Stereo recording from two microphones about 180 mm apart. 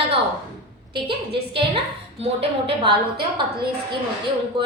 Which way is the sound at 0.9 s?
30° right (ahead or behind).